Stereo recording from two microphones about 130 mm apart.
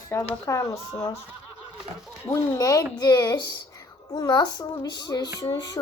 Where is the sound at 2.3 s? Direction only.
25° left (ahead or behind).